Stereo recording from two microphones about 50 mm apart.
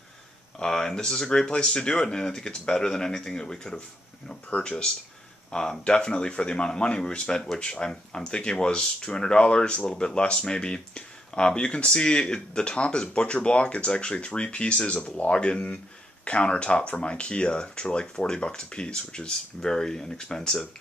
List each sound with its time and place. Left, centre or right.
0.6 s speech: centre